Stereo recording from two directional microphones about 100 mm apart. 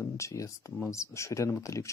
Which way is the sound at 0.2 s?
30° left (ahead or behind).